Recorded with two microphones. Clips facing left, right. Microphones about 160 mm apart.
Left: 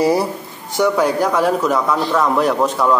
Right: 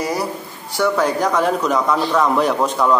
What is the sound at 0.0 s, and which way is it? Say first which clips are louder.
Speech: left 6 dB; 30° left (ahead or behind).